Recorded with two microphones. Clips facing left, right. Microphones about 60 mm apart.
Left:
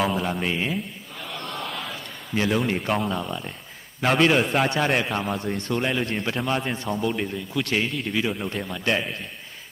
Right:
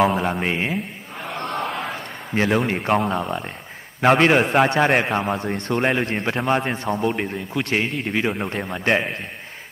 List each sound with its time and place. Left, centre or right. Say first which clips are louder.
0.0 s a man's voice: right 5 dB; right
1.2 s a sound: right 7 dB; right
2.8 s a man's voice: right 5 dB; right
5.3 s a man's voice: right 3 dB; right
7.9 s a man's voice: right 3 dB; right